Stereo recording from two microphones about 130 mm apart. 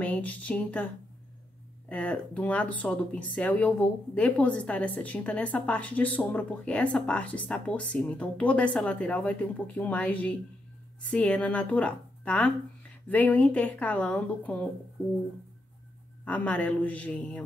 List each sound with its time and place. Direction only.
0.0 s a sound: 10° left (ahead or behind)
1.9 s speech: 10° left (ahead or behind)
16.3 s speech: 10° left (ahead or behind)